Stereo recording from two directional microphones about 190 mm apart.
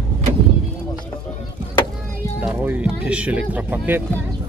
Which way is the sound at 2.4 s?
10° right (ahead or behind).